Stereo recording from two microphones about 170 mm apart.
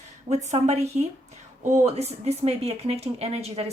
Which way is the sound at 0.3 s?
40° right (ahead or behind).